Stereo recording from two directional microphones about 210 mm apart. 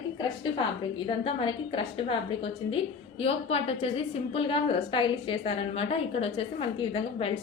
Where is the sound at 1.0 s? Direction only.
25° left (ahead or behind).